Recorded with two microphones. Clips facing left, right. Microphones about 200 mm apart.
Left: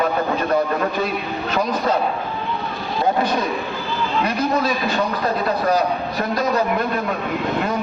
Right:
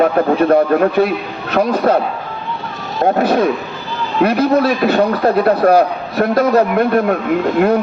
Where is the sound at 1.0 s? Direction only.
65° right (ahead or behind).